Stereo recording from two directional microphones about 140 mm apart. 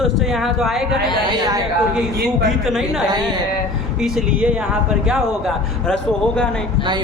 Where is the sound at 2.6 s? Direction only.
5° right (ahead or behind).